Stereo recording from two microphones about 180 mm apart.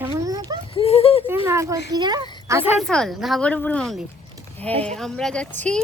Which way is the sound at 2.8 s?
Centre (ahead or behind).